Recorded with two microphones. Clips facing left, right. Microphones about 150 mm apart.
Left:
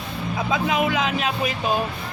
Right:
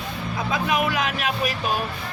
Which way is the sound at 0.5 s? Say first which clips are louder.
Left 1 dB; 20° left (ahead or behind).